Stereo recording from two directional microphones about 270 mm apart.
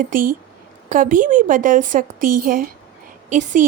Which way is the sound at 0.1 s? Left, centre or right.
Right.